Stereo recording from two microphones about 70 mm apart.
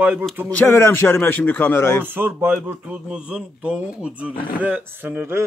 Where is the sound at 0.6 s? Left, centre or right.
Left.